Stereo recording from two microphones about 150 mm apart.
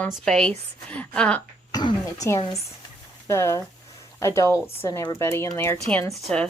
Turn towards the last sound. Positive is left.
turn(degrees=5)  # may be behind; listen again after turning